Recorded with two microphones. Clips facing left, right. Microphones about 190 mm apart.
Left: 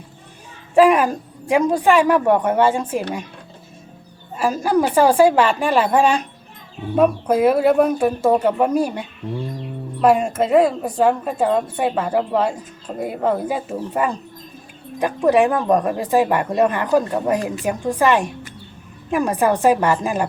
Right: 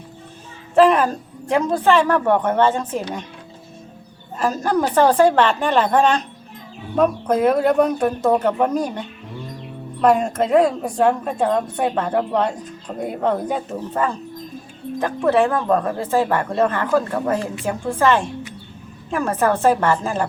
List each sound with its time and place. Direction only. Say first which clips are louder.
0.8 s speech: left 1 dB; 10° left (ahead or behind)
4.4 s a woman's voice: left 2 dB; 10° left (ahead or behind)